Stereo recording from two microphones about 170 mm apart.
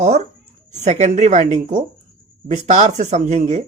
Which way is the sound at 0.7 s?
40° right (ahead or behind).